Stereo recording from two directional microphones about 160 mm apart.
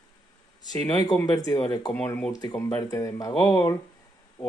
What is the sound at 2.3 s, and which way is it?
Speech, 25° left (ahead or behind).